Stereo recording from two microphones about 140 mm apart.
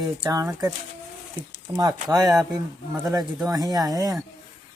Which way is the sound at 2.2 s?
Centre (ahead or behind).